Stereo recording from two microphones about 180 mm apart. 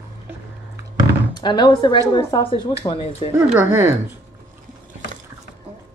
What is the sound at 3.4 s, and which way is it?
Speech, 10° right (ahead or behind).